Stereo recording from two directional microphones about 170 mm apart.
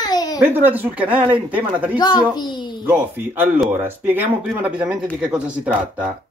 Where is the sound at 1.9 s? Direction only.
25° left (ahead or behind).